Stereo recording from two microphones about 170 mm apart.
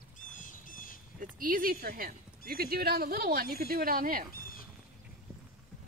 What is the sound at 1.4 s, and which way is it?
Speech, 55° right (ahead or behind).